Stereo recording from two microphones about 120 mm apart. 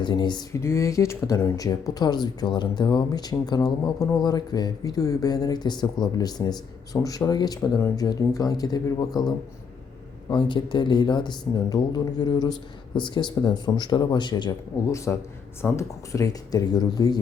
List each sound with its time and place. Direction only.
0.0 s speech: 40° left (ahead or behind)
0.6 s speech: 25° left (ahead or behind)
14.8 s a man's voice: 25° left (ahead or behind)